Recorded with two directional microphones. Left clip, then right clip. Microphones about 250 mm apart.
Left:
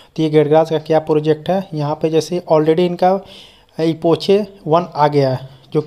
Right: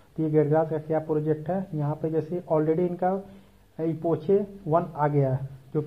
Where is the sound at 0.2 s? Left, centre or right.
Left.